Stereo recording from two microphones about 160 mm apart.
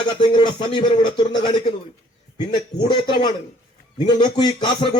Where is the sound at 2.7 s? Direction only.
30° left (ahead or behind).